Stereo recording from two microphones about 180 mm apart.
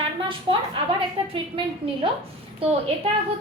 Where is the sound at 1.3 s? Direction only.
30° right (ahead or behind).